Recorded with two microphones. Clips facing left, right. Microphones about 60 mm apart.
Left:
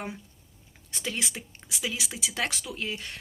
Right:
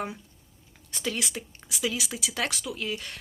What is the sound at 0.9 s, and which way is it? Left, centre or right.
Speech, left.